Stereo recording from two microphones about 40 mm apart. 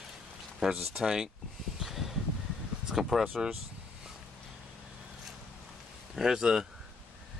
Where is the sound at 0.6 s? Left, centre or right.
Centre.